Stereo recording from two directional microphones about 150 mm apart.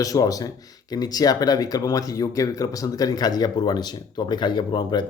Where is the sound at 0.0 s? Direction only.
25° left (ahead or behind).